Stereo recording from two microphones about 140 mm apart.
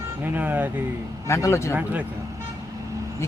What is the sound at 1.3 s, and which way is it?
Speech, 20° left (ahead or behind).